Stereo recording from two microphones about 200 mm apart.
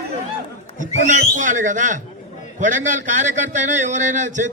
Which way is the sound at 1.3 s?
40° right (ahead or behind).